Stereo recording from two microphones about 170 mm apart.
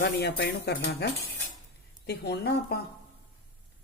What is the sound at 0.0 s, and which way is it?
Speech, 75° left (ahead or behind).